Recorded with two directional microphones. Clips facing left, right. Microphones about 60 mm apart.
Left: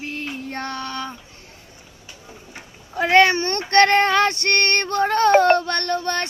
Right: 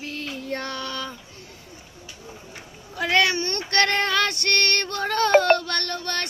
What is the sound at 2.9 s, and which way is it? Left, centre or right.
Child singing, left.